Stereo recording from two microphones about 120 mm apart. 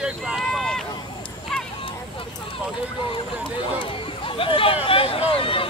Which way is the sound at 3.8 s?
45° left (ahead or behind).